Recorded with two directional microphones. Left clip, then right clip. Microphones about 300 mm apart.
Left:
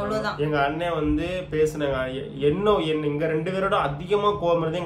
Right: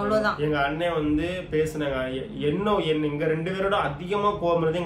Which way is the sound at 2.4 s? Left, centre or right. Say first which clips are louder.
Left 4 dB; centre.